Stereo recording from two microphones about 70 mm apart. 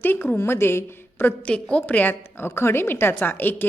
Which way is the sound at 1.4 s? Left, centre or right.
Centre.